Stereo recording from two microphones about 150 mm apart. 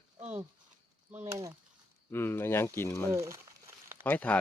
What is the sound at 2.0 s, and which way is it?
Speech, 15° left (ahead or behind).